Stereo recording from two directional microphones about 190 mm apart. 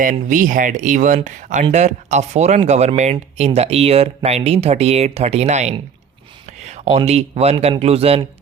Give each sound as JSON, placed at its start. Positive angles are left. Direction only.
{"t": 0.0, "sound": "speech", "side_deg": -45}